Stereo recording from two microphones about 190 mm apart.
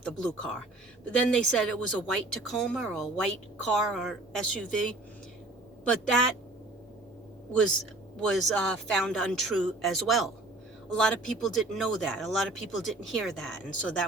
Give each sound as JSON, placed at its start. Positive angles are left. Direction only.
{"t": 0.0, "sound": "a woman's voice", "side_deg": 5}
{"t": 8.2, "sound": "a woman's voice", "side_deg": 0}